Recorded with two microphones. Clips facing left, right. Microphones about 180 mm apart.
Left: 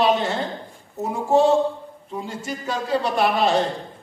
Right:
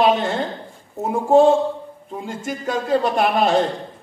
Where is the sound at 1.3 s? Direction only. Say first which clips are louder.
Right 3 dB; 50° right (ahead or behind).